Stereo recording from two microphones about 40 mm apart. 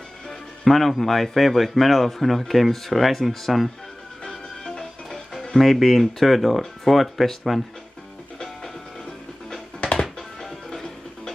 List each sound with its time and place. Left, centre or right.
0.3 s speech: centre
4.2 s music: left
5.4 s speech: centre
10.4 s music: centre